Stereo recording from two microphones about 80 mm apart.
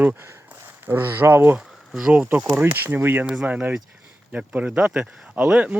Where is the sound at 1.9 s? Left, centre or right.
Centre.